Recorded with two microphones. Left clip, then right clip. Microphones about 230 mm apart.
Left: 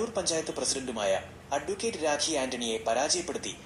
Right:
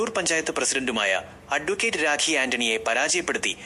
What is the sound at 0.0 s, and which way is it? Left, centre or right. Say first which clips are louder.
A man's voice: right 6 dB; right.